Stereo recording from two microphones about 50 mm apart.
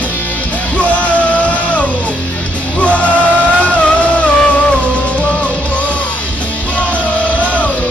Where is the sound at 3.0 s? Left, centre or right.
Left.